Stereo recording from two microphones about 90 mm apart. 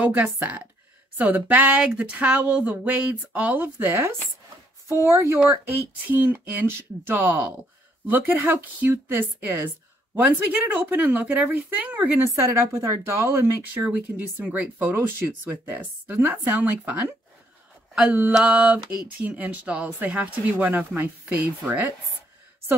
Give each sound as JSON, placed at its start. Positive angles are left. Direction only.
{"t": 0.0, "sound": "speech", "side_deg": -15}
{"t": 3.7, "sound": "speech", "side_deg": -30}
{"t": 18.3, "sound": "speech", "side_deg": -10}